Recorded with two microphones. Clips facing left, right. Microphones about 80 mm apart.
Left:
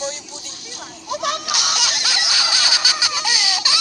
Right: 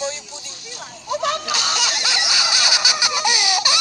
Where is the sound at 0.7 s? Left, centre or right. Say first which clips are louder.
Right 2 dB; right.